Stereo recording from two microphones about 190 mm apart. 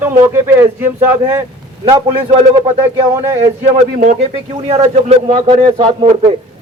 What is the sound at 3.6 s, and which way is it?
A man's voice, 40° right (ahead or behind).